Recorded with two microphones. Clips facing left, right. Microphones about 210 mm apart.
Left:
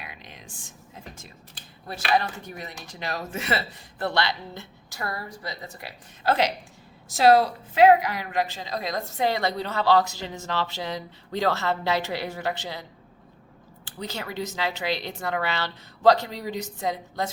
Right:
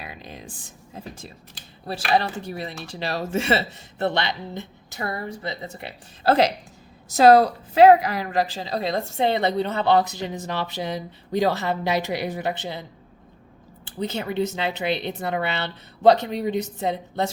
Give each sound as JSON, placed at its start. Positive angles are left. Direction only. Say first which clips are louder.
{"t": 0.0, "sound": "a sound", "louder": "right 6 dB", "side_deg": -35}
{"t": 0.9, "sound": "a woman's voice", "louder": "right 7 dB", "side_deg": -30}
{"t": 14.0, "sound": "a woman's voice", "louder": "right 7 dB", "side_deg": -20}